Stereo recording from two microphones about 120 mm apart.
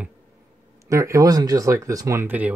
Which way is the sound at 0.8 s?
25° right (ahead or behind).